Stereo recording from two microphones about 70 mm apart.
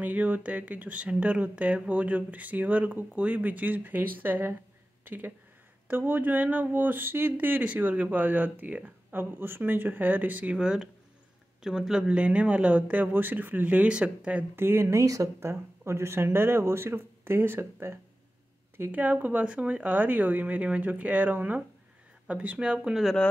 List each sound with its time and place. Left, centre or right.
0.0 s speech: right
14.5 s speech: right
18.8 s speech: right
22.8 s speech: centre